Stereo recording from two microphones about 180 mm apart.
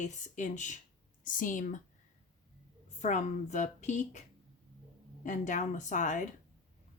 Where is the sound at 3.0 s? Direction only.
40° left (ahead or behind).